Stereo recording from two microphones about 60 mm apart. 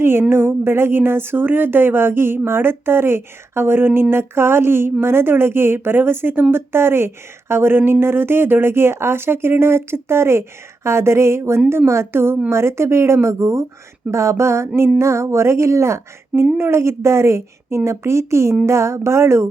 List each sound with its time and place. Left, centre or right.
0.0 s speech: right